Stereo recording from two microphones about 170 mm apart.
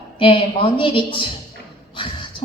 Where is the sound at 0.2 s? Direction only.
30° left (ahead or behind).